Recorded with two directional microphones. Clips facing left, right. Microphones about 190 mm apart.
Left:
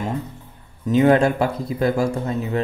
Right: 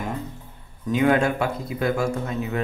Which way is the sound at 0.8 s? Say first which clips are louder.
Left 4 dB; 30° left (ahead or behind).